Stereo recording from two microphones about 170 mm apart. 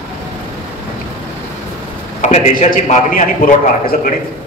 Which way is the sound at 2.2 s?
45° left (ahead or behind).